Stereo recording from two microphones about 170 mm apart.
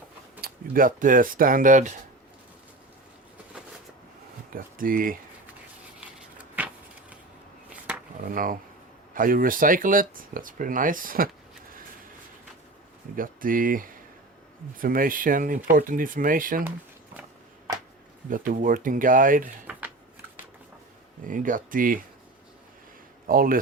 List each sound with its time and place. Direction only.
0.4 s speech: 55° right (ahead or behind)
4.5 s speech: 55° right (ahead or behind)
6.6 s vehicle: 10° right (ahead or behind)
7.7 s a sound: 5° right (ahead or behind)
8.2 s speech: 55° right (ahead or behind)
13.1 s speech: 55° right (ahead or behind)
18.3 s speech: 50° right (ahead or behind)
21.2 s speech: 50° right (ahead or behind)
23.2 s speech: 55° right (ahead or behind)